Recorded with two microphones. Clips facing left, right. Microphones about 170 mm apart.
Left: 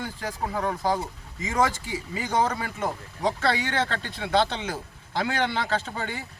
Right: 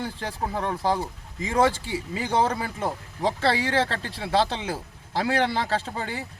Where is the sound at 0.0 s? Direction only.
30° right (ahead or behind).